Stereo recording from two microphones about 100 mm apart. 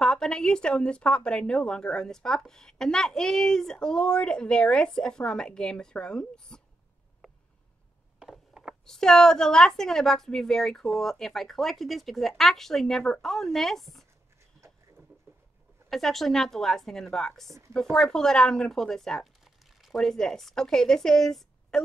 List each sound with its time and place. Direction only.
0.0 s a woman's voice: 5° left (ahead or behind)
8.2 s a sound: 5° right (ahead or behind)
8.8 s a woman's voice: 5° left (ahead or behind)
15.9 s a woman's voice: 5° left (ahead or behind)
17.5 s speech: 30° right (ahead or behind)
17.9 s speech: 5° left (ahead or behind)